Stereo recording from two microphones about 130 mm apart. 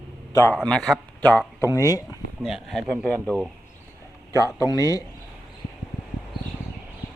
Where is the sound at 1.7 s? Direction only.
25° left (ahead or behind).